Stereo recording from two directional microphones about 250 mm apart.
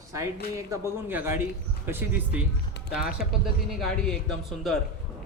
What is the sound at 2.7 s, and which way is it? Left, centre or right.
Speech, left.